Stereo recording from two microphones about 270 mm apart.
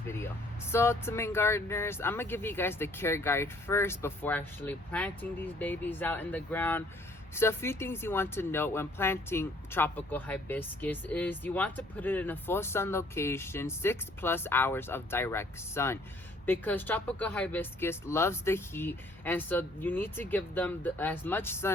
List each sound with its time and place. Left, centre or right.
0.7 s speech: centre